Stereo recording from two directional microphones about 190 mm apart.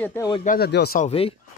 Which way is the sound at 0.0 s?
10° left (ahead or behind).